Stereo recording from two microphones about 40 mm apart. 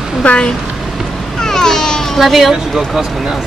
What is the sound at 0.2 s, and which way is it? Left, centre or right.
Speech, left.